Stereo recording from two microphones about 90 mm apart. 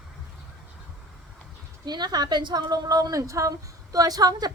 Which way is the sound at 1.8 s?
50° right (ahead or behind).